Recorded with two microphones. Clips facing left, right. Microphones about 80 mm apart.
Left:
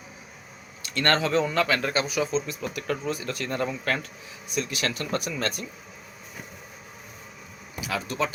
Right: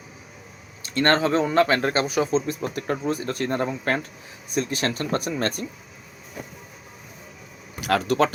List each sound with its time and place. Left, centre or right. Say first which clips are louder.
0.8 s speech: right 4 dB; right
7.8 s speech: right 8 dB; right